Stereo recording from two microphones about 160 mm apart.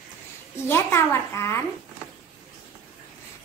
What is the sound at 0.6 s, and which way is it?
Speech, 15° left (ahead or behind).